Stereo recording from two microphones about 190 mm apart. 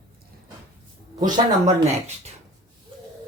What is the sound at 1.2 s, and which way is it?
Speech, 35° right (ahead or behind).